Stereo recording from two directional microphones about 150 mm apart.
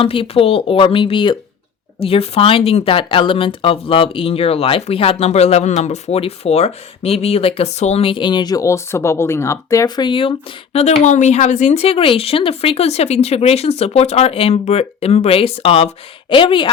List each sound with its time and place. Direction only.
0.0 s speech: 35° left (ahead or behind)